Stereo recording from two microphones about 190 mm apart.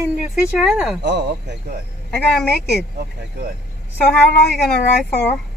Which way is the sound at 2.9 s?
50° right (ahead or behind).